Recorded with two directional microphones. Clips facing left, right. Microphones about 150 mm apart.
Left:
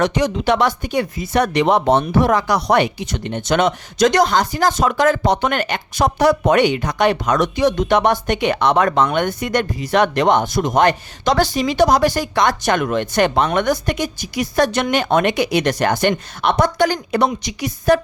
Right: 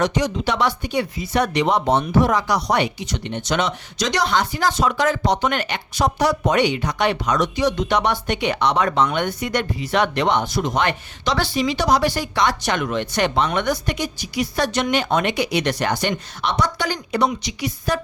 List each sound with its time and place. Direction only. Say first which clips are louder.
0.0 s speech: left 3 dB; 60° left (ahead or behind)